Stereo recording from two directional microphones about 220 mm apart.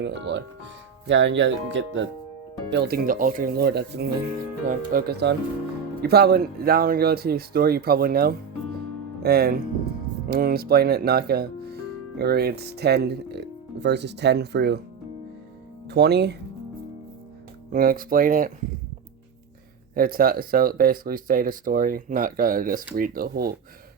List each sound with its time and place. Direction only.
0.0 s speech: 55° right (ahead or behind)
15.9 s speech: 50° right (ahead or behind)
17.7 s speech: 40° right (ahead or behind)
19.9 s speech: 40° right (ahead or behind)